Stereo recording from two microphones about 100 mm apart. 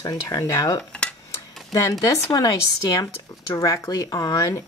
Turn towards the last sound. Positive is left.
turn(degrees=35)  # may be behind; listen again after turning